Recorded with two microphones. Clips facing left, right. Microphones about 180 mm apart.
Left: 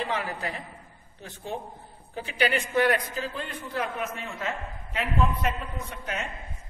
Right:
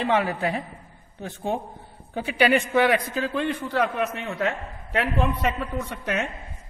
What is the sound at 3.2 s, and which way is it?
A man's voice, 65° right (ahead or behind).